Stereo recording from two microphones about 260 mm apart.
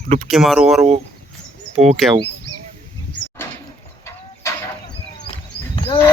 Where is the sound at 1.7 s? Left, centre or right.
Right.